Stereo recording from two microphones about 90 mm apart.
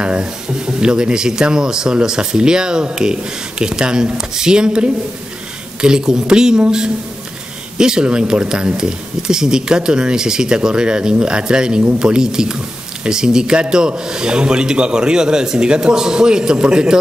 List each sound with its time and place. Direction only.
0.0 s speech: 10° right (ahead or behind)